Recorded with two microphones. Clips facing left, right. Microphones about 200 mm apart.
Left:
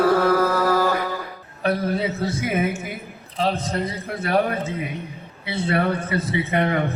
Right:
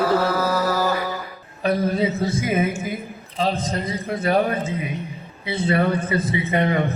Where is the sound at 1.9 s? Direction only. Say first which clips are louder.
Right 2 dB; 65° left (ahead or behind).